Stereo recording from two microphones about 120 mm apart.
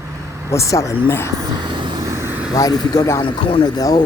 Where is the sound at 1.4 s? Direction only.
40° right (ahead or behind).